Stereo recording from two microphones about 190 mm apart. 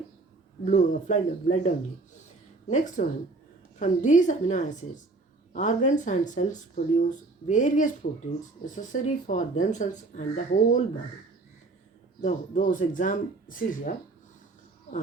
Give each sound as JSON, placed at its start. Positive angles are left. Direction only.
{"t": 0.6, "sound": "speech", "side_deg": 40}
{"t": 12.2, "sound": "speech", "side_deg": 40}